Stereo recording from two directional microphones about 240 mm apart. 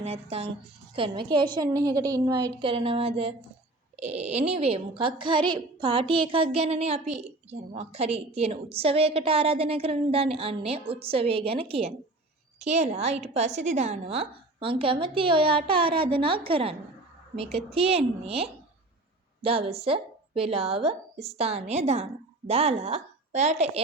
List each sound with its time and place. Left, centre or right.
0.0 s a woman's voice: right